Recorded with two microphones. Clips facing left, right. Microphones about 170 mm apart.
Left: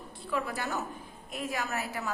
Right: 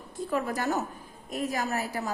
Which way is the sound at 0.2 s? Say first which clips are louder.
Right 4 dB; 45° right (ahead or behind).